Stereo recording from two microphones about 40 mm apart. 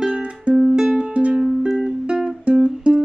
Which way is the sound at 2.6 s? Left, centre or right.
Right.